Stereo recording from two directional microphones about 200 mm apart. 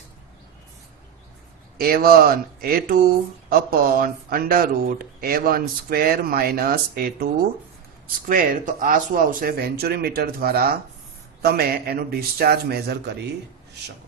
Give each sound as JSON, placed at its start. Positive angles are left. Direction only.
{"t": 1.8, "sound": "speech", "side_deg": -50}
{"t": 8.3, "sound": "speech", "side_deg": -45}